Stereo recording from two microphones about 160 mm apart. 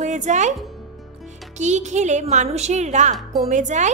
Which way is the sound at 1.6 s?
45° right (ahead or behind).